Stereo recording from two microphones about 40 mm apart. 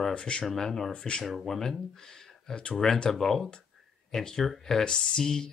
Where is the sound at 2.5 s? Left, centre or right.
Left.